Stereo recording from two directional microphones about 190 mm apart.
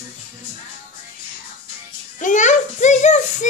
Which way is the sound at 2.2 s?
40° left (ahead or behind).